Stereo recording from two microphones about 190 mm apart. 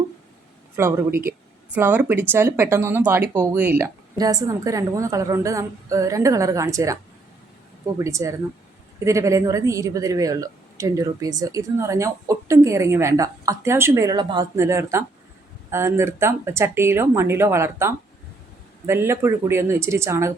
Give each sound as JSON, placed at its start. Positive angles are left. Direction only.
{"t": 0.8, "sound": "a woman's voice", "side_deg": -15}